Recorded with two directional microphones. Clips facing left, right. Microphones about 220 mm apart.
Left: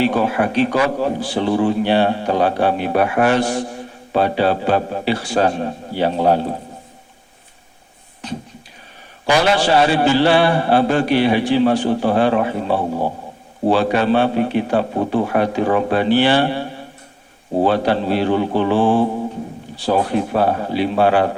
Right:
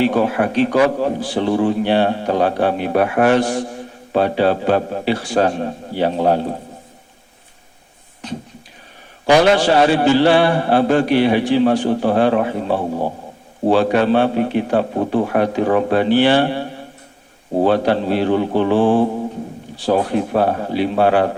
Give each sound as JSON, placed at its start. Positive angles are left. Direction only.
{"t": 0.0, "sound": "a man's voice", "side_deg": -45}
{"t": 9.4, "sound": "a man's voice", "side_deg": -45}
{"t": 17.7, "sound": "a man's voice", "side_deg": -50}